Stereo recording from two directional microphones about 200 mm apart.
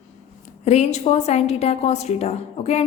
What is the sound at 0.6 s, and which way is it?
A woman's voice, 35° left (ahead or behind).